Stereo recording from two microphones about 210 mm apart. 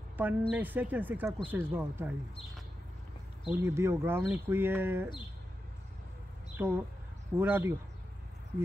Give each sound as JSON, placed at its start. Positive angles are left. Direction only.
{"t": 0.2, "sound": "speech", "side_deg": -10}
{"t": 3.4, "sound": "speech", "side_deg": -10}
{"t": 6.5, "sound": "speech", "side_deg": -10}